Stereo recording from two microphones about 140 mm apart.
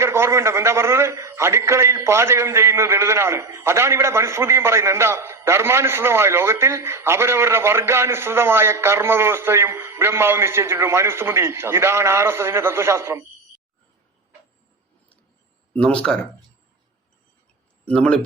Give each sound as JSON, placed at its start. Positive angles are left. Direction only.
{"t": 0.0, "sound": "a man's voice", "side_deg": -20}
{"t": 15.7, "sound": "speech", "side_deg": 5}
{"t": 17.8, "sound": "speech", "side_deg": 5}